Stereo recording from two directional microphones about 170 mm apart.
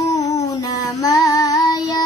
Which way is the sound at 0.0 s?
20° left (ahead or behind).